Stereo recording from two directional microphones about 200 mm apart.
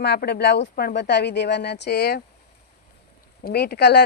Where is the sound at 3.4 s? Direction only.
55° left (ahead or behind).